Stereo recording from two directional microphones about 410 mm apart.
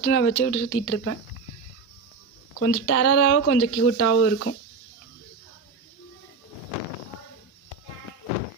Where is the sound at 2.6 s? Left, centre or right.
Left.